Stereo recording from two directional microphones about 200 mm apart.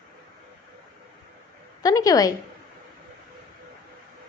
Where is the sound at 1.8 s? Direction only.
20° left (ahead or behind).